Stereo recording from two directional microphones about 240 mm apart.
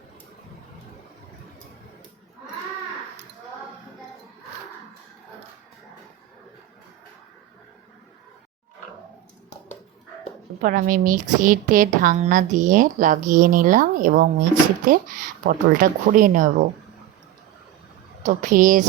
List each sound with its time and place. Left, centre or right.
10.6 s speech: right
18.3 s speech: right